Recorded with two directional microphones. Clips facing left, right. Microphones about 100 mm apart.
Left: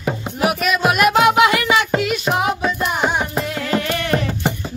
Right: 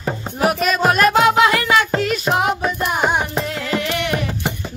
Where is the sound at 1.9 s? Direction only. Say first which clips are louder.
Even; centre (ahead or behind).